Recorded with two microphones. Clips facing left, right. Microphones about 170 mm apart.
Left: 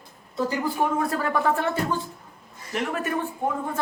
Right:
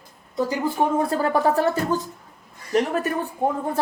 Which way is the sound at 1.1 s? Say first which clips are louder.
Right 4 dB; 30° right (ahead or behind).